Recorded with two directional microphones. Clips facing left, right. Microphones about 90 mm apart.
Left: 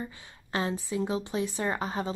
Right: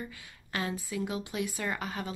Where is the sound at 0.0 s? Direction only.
30° left (ahead or behind).